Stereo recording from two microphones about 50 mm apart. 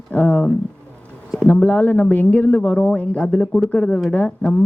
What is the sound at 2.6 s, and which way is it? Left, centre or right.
Speech, centre.